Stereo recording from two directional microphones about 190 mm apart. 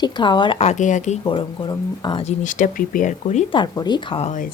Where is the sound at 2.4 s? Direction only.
45° left (ahead or behind).